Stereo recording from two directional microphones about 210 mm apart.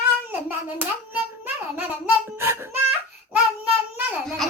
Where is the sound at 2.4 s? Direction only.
10° right (ahead or behind).